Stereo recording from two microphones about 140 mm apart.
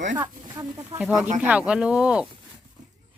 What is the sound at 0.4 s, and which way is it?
Speech, 30° right (ahead or behind).